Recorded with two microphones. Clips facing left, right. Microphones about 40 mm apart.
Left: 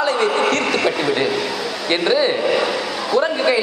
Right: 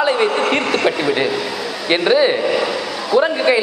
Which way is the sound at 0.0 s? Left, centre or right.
Centre.